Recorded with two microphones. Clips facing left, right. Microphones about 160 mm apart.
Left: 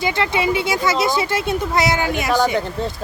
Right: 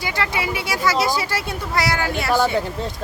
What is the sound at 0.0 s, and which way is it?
Speech, 25° left (ahead or behind).